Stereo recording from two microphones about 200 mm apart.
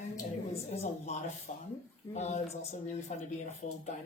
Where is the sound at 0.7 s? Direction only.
35° left (ahead or behind).